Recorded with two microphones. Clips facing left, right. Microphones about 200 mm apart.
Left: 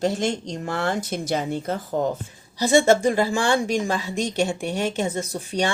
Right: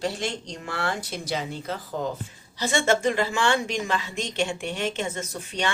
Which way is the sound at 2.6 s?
35° left (ahead or behind).